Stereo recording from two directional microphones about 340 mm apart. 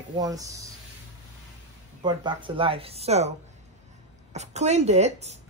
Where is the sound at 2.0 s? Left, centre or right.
Centre.